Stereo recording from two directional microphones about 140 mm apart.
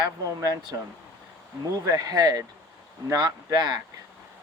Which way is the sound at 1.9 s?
25° right (ahead or behind).